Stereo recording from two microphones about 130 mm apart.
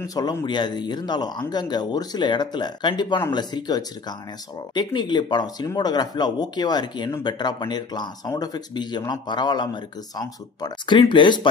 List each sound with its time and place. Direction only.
0.0 s speech: 30° left (ahead or behind)